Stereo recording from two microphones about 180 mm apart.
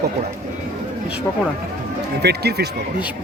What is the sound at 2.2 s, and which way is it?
Speech, 65° right (ahead or behind).